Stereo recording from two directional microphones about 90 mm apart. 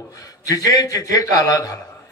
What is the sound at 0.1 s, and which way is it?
A man's voice, 40° left (ahead or behind).